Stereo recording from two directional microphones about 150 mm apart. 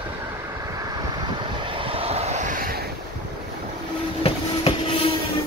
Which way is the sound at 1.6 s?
35° right (ahead or behind).